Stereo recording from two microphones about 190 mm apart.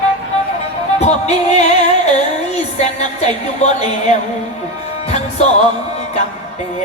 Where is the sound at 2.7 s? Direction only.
35° left (ahead or behind).